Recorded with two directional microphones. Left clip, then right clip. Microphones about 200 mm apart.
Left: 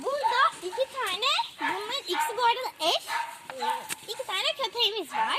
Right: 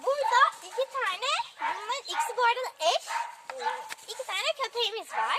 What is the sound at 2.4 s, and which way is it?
Speech, 30° left (ahead or behind).